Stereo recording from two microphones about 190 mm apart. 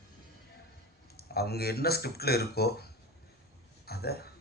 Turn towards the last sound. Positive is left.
turn(degrees=55)  # may be behind; listen again after turning